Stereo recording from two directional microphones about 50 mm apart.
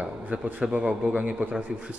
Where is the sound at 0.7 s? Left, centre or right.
Right.